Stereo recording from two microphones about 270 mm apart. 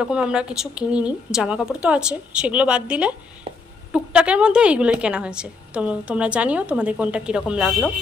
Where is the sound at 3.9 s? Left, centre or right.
Centre.